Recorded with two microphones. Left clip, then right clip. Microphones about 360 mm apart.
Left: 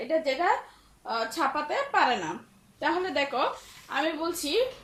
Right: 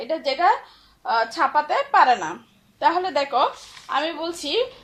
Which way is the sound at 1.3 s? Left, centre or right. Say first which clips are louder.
Right 8 dB; centre.